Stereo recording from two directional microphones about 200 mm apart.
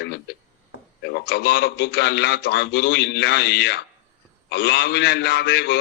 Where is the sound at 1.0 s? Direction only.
55° left (ahead or behind).